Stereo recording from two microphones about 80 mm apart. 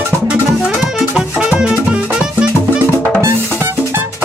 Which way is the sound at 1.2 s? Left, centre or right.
Centre.